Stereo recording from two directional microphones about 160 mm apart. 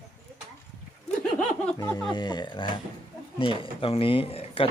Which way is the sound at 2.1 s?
25° left (ahead or behind).